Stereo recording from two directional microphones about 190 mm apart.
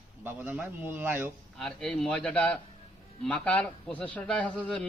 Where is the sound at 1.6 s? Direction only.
5° left (ahead or behind).